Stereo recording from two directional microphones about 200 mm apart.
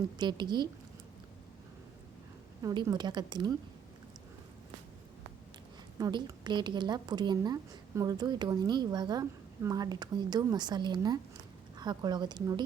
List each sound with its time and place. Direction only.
0.2 s a woman's voice: 20° right (ahead or behind)
2.6 s a woman's voice: 15° right (ahead or behind)
6.0 s a woman's voice: 20° right (ahead or behind)